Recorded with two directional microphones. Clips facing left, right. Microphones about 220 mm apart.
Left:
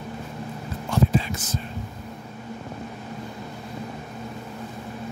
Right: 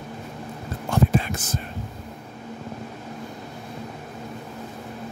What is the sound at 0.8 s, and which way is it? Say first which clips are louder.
Whispering: right 1 dB; 55° right (ahead or behind).